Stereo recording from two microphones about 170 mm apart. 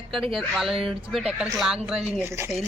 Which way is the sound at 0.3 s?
Centre (ahead or behind).